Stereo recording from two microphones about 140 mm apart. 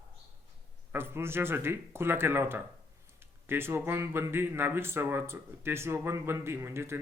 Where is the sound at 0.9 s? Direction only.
15° right (ahead or behind).